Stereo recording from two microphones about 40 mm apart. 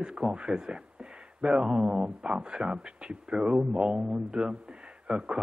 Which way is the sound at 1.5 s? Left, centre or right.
Right.